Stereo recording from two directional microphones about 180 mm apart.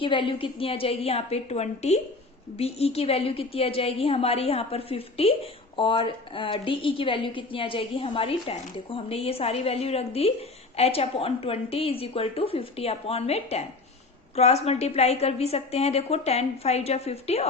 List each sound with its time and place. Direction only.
0.0 s a woman's voice: 30° left (ahead or behind)